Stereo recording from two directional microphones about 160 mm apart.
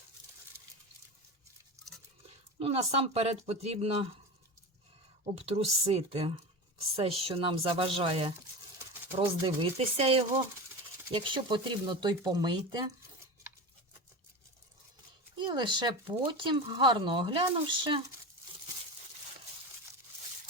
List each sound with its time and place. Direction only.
2.6 s speech: 40° right (ahead or behind)
5.2 s speech: 40° right (ahead or behind)
9.4 s speech: 35° right (ahead or behind)
15.4 s speech: 30° right (ahead or behind)